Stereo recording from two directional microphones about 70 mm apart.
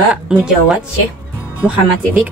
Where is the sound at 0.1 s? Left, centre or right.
Centre.